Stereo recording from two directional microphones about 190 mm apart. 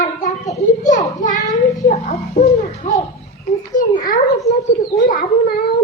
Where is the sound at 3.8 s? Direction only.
45° left (ahead or behind).